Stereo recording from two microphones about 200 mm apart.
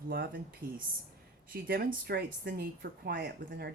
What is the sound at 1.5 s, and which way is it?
Speech, 50° right (ahead or behind).